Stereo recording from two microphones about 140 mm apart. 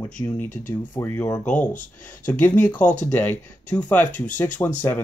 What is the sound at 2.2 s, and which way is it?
Speech, 15° left (ahead or behind).